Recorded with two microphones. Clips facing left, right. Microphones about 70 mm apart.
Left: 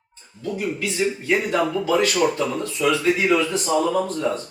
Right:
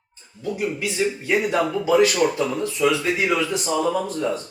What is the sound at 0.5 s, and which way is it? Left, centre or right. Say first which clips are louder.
Speech: even; centre.